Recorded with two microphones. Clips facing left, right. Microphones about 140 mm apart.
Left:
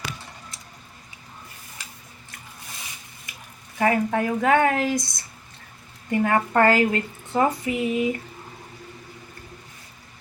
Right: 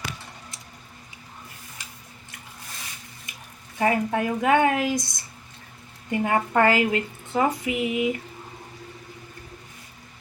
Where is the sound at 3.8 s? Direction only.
20° right (ahead or behind).